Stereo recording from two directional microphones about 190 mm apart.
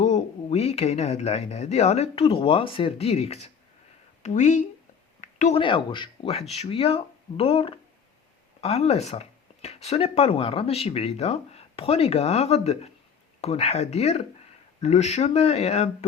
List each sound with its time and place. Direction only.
0.0 s speech: 35° left (ahead or behind)